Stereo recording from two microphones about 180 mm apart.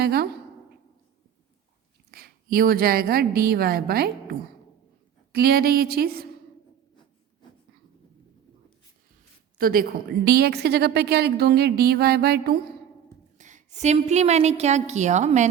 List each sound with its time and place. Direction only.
0.0 s speech: 60° right (ahead or behind)
2.0 s a woman's voice: 60° right (ahead or behind)
9.6 s speech: 55° right (ahead or behind)
13.4 s a woman's voice: 40° right (ahead or behind)